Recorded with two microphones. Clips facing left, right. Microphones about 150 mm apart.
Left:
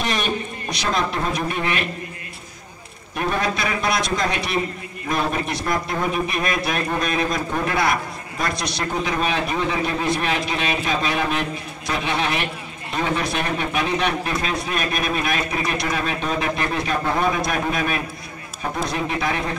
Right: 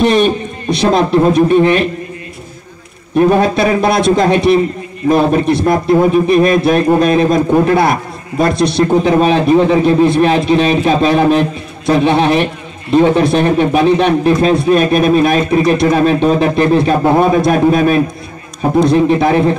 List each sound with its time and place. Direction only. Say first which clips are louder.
0.0 s a man's voice: right 13 dB; 30° right (ahead or behind)
3.2 s a man's voice: right 13 dB; 30° right (ahead or behind)